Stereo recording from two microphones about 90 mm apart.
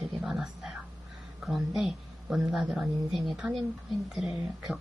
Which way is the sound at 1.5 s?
5° right (ahead or behind).